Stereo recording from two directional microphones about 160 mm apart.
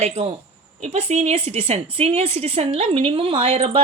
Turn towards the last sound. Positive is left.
turn(degrees=-40)  # may be behind; listen again after turning